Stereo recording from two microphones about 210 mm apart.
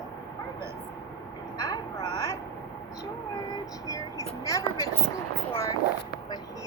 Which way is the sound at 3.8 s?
15° left (ahead or behind).